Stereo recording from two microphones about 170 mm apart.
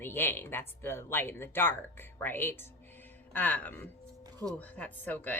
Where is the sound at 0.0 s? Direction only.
10° left (ahead or behind).